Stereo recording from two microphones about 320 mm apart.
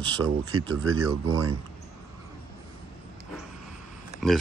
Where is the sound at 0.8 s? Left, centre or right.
Right.